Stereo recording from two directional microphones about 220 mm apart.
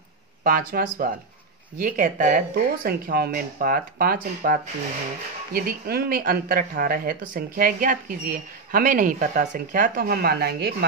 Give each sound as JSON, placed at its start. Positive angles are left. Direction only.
{"t": 0.4, "sound": "speech", "side_deg": -40}